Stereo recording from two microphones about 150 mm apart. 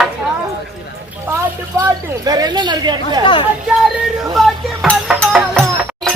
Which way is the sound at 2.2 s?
25° right (ahead or behind).